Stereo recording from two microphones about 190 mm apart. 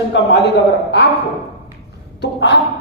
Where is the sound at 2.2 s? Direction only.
65° left (ahead or behind).